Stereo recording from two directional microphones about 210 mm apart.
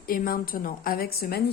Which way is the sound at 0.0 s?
45° left (ahead or behind).